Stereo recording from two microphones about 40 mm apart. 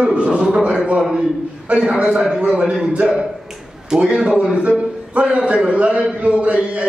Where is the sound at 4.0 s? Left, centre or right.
Right.